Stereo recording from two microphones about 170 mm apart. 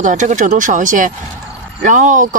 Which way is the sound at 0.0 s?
45° right (ahead or behind).